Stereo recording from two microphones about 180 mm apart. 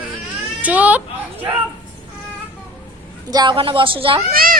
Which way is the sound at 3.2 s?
25° right (ahead or behind).